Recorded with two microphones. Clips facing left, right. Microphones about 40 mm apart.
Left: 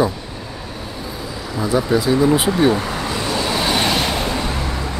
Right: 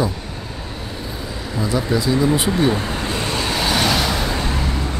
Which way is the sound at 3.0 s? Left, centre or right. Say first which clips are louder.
Left 1 dB; right.